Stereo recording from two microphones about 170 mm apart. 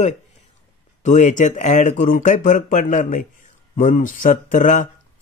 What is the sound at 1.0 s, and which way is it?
Speech, 45° left (ahead or behind).